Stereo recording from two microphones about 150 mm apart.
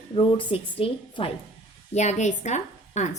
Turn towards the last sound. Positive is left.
turn(degrees=50)  # may be behind; listen again after turning